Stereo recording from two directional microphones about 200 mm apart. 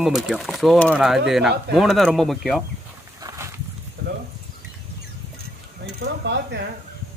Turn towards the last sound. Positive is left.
turn(degrees=-60)  # may be behind; listen again after turning